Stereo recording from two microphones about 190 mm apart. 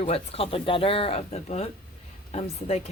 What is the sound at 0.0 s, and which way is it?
A woman's voice, 30° left (ahead or behind).